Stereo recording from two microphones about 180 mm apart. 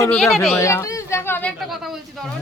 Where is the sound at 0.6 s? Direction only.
15° left (ahead or behind).